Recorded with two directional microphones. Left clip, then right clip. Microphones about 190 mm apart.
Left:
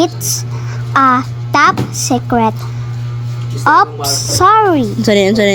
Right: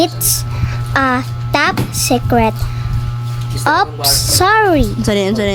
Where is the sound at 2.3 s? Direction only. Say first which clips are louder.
Left 1 dB; 10° right (ahead or behind).